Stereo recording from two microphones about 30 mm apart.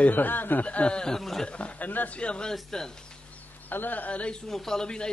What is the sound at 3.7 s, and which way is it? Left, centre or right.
Speech, left.